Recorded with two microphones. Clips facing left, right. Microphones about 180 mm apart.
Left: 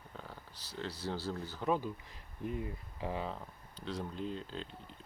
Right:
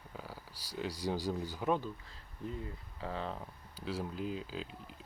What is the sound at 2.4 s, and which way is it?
Speech, 15° left (ahead or behind).